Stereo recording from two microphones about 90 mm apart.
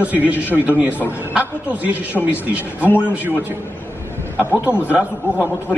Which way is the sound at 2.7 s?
15° right (ahead or behind).